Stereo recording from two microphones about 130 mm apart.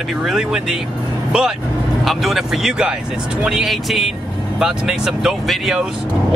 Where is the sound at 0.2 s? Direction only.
5° right (ahead or behind).